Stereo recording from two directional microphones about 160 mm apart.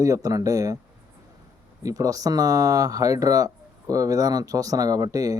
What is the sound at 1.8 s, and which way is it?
Speech, 20° right (ahead or behind).